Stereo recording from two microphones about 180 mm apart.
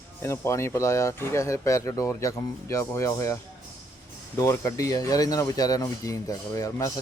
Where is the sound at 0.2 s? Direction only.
15° left (ahead or behind).